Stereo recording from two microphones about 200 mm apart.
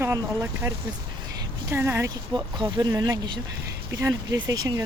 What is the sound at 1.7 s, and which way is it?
Speech, 15° right (ahead or behind).